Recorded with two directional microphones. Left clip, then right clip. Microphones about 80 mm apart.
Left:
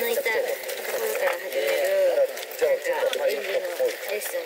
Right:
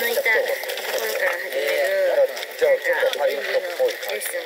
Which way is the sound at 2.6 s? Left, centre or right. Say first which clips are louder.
Right 4 dB; left.